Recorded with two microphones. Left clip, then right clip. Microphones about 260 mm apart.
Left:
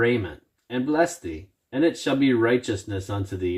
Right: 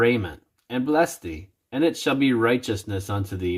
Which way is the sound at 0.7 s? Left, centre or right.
Right.